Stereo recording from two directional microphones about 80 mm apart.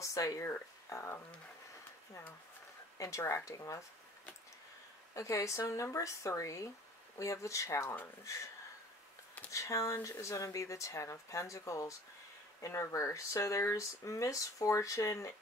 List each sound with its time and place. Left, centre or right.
0.0 s speech: left
3.0 s speech: left
5.1 s speech: left
9.5 s speech: left